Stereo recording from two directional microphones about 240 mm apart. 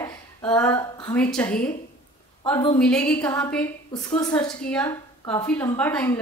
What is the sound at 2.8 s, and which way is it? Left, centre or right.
A woman's voice, centre.